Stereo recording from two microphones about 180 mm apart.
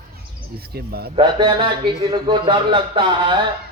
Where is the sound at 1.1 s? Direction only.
25° right (ahead or behind).